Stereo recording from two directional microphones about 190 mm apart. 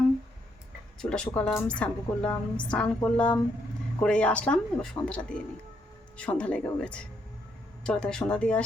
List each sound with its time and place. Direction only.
1.1 s a woman's voice: 5° left (ahead or behind)